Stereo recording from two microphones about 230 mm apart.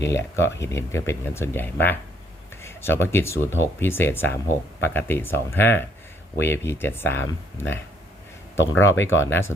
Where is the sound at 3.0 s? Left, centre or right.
Centre.